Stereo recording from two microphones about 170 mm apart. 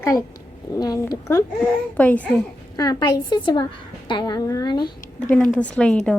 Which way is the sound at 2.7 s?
20° left (ahead or behind).